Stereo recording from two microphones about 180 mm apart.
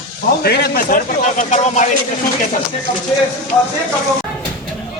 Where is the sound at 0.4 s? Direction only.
60° left (ahead or behind); by 1.9 s 40° left (ahead or behind).